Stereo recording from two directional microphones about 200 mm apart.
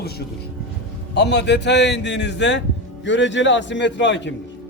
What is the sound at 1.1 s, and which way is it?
A man's voice, 60° left (ahead or behind).